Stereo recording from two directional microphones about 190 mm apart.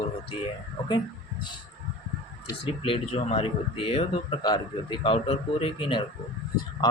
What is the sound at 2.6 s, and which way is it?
Speech, 30° left (ahead or behind).